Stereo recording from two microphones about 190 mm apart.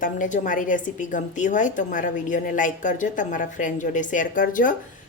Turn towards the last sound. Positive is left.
turn(degrees=45)  # may be behind; listen again after turning